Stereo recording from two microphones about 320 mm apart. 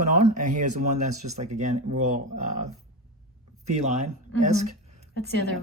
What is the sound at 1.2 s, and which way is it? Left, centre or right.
Speech, right.